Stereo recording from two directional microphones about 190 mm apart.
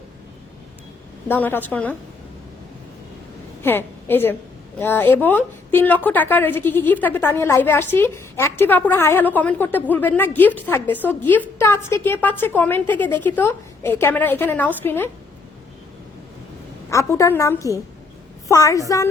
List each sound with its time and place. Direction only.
1.3 s a woman's voice: 10° left (ahead or behind)
3.6 s a woman's voice: 10° left (ahead or behind)
16.9 s a woman's voice: 15° left (ahead or behind)